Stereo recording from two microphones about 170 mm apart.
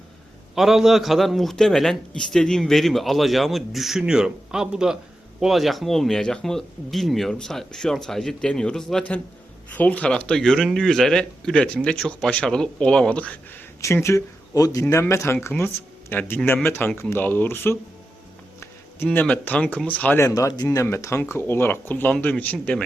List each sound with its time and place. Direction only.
0.5 s a man's voice: centre (ahead or behind)